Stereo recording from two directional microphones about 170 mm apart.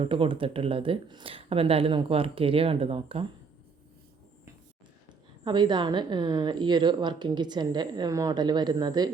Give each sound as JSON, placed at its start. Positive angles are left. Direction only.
{"t": 0.0, "sound": "speech", "side_deg": -30}
{"t": 5.5, "sound": "a woman's voice", "side_deg": -25}